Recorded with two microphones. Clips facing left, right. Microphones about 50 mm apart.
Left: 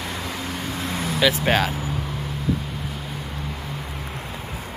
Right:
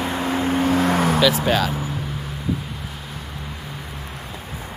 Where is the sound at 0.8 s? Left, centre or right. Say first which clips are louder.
Right 9 dB; right.